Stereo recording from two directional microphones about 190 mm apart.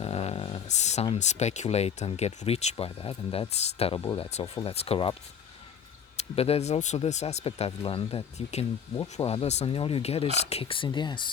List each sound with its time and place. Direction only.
0.0 s a sound: 30° left (ahead or behind)
1.0 s speech: 35° left (ahead or behind)
6.1 s speech: 30° left (ahead or behind)